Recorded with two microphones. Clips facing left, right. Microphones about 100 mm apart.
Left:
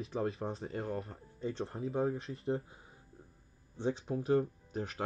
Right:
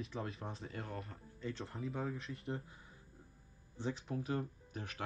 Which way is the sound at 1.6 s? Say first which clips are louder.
Left 9 dB; 35° left (ahead or behind).